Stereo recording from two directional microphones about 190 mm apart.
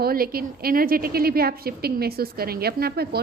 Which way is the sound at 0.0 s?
50° right (ahead or behind).